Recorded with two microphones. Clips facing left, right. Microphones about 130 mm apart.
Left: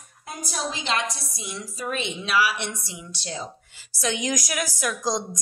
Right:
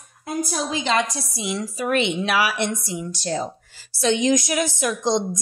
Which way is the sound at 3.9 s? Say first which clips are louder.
Right 8 dB; 30° right (ahead or behind).